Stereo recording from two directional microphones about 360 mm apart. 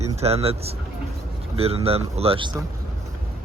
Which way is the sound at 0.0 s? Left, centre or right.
Centre.